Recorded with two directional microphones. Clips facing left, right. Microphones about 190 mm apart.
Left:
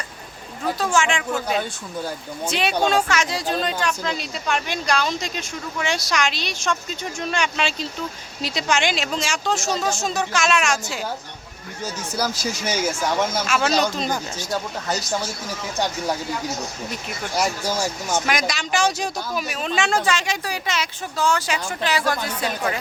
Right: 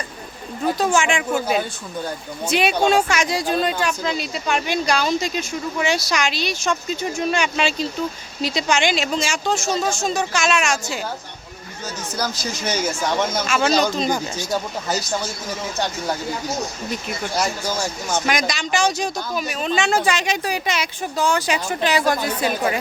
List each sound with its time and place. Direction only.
0.8 s speech: 15° right (ahead or behind); by 11.0 s centre (ahead or behind)
12.1 s speech: 10° left (ahead or behind)
17.3 s speech: 10° left (ahead or behind)
20.0 s speech: 15° right (ahead or behind)